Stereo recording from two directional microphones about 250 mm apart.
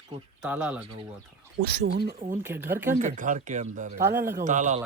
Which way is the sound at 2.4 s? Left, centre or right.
Centre.